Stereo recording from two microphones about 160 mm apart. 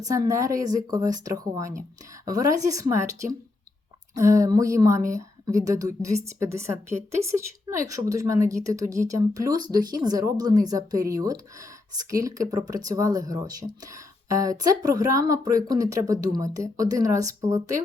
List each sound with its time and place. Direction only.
0.0 s a woman's voice: 20° right (ahead or behind)
4.1 s a woman's voice: 20° right (ahead or behind)